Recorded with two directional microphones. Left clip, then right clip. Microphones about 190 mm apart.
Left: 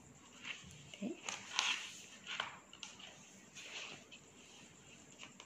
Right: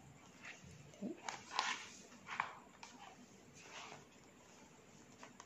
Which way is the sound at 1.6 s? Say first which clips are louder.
Left 3 dB; 5° right (ahead or behind).